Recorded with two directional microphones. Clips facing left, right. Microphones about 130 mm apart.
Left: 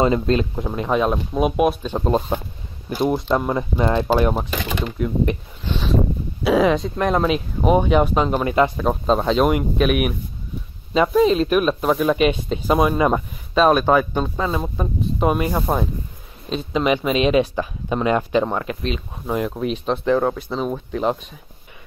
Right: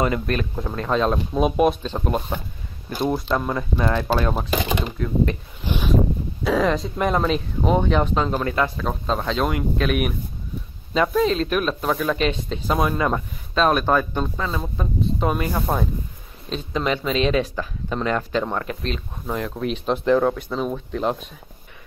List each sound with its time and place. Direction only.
0.0 s speech: 25° left (ahead or behind)
2.0 s speech: 25° left (ahead or behind)
2.9 s speech: 5° left (ahead or behind)
3.2 s speech: 20° left (ahead or behind)
4.5 s speech: 15° right (ahead or behind)
4.9 s speech: 15° left (ahead or behind)
6.4 s speech: 5° left (ahead or behind)